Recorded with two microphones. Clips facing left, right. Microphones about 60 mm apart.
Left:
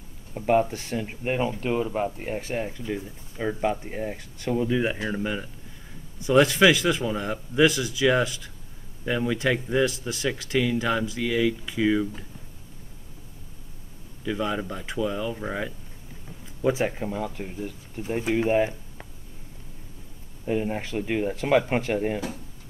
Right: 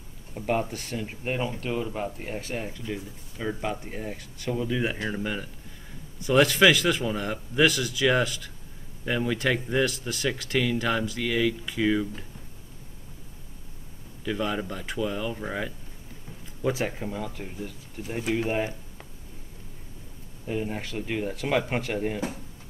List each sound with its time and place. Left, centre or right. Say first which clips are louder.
0.3 s speech: left 6 dB; centre
0.7 s speech: left 3 dB; centre
14.2 s speech: left 1 dB; centre
16.8 s speech: left 3 dB; centre
18.6 s a sound: left 5 dB; centre
20.4 s speech: left 4 dB; centre